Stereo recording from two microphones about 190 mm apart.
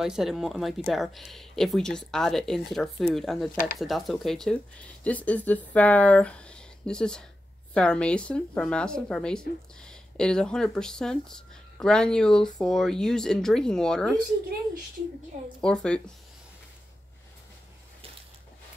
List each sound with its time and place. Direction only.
0.0 s speech: centre (ahead or behind)
15.6 s speech: 5° left (ahead or behind)